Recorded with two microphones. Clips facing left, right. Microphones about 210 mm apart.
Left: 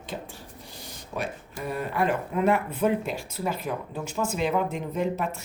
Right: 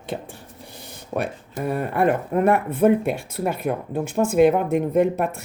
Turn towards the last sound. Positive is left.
turn(degrees=-55)  # may be behind; listen again after turning